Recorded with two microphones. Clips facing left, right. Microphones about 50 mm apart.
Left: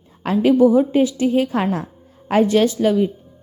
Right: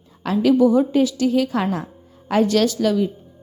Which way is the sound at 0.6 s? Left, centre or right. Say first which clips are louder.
Left 2 dB; centre.